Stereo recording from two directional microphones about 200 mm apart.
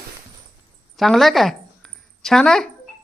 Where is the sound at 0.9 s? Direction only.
Centre (ahead or behind).